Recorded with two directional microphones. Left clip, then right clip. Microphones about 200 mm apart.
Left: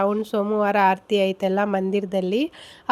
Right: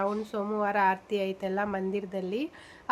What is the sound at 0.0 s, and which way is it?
A woman's voice, 45° left (ahead or behind).